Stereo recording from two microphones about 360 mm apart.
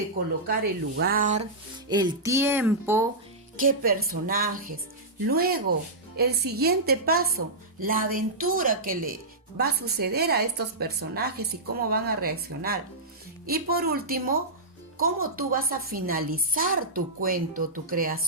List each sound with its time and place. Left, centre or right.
0.4 s a woman's voice: right; by 3.1 s centre
3.6 s a woman's voice: right